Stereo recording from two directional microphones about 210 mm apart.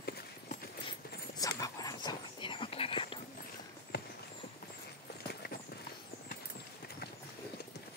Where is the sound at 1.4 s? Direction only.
15° left (ahead or behind).